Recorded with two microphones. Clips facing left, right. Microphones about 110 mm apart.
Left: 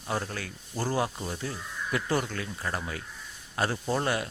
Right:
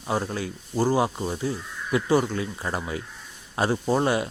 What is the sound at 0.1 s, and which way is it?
Speech, 20° right (ahead or behind).